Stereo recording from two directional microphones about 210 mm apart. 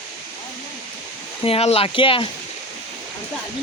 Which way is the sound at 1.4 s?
30° left (ahead or behind).